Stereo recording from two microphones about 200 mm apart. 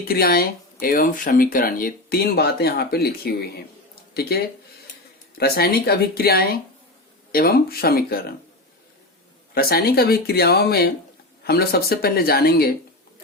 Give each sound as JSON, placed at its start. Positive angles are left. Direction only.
{"t": 0.0, "sound": "speech", "side_deg": 50}
{"t": 9.6, "sound": "speech", "side_deg": 50}